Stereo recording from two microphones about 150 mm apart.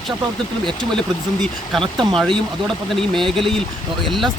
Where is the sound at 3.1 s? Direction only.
35° right (ahead or behind).